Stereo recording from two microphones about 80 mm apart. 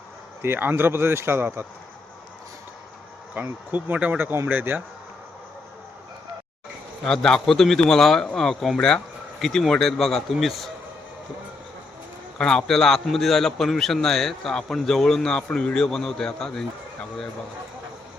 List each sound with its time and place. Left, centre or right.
0.4 s speech: right
3.3 s speech: right
7.1 s a man's voice: centre
12.4 s a man's voice: centre